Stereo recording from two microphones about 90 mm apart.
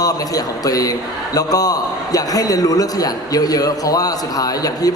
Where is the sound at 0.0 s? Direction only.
45° left (ahead or behind).